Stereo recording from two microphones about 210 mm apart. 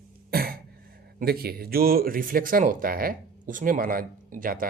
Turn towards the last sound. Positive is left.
turn(degrees=-40)  # may be behind; listen again after turning